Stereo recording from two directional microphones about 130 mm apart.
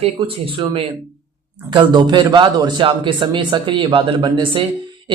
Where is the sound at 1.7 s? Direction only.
35° right (ahead or behind).